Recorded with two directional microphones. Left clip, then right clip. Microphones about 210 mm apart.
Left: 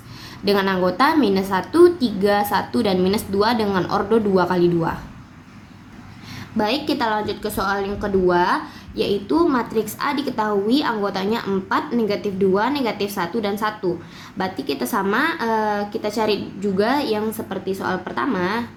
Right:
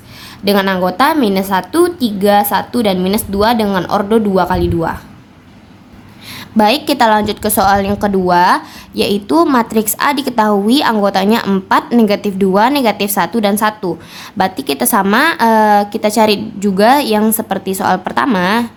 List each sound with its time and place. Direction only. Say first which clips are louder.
0.4 s a woman's voice: right 6 dB; 35° right (ahead or behind)
6.6 s a woman's voice: right 10 dB; 45° right (ahead or behind)